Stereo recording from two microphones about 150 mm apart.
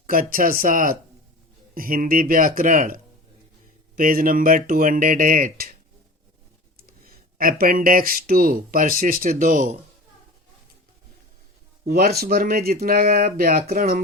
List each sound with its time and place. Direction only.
0.1 s speech: 70° right (ahead or behind)
7.0 s speech: 75° right (ahead or behind)
11.9 s speech: 90° right; by 14.0 s 75° right (ahead or behind)